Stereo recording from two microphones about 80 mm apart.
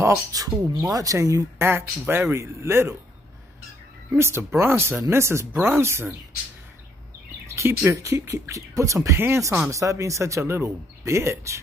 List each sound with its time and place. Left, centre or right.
0.0 s speech: right
1.7 s speech: right
4.1 s speech: right
7.4 s speech: right